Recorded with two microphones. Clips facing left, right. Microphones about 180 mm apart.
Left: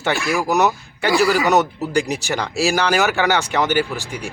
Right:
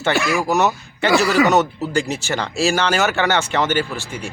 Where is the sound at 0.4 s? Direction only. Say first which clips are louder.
Even; 15° left (ahead or behind).